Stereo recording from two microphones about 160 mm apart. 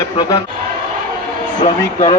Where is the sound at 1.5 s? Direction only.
45° left (ahead or behind).